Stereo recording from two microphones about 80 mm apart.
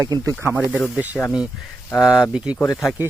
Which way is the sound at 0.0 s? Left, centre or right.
Right.